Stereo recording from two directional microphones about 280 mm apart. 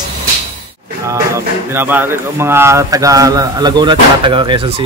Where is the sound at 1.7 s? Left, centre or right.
Centre.